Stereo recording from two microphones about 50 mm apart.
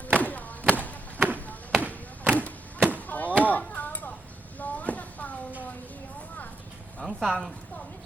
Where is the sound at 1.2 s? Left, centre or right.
Right.